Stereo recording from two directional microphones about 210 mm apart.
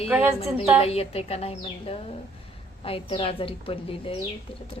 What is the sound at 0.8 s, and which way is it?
A woman's voice, 30° left (ahead or behind).